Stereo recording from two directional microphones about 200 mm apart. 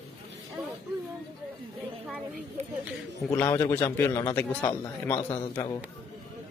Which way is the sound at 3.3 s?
10° left (ahead or behind).